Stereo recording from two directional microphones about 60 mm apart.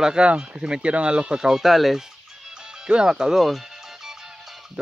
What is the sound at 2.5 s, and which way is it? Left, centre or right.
Music, centre.